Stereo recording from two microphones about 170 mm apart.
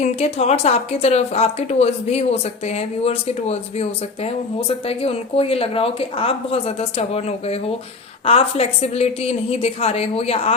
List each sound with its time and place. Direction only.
0.0 s a woman's voice: 35° left (ahead or behind)